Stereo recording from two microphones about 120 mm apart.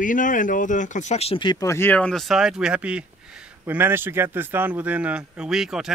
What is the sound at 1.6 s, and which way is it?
A man's voice, 20° left (ahead or behind).